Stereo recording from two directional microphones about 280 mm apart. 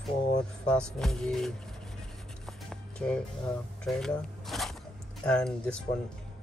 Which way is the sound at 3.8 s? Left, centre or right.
Centre.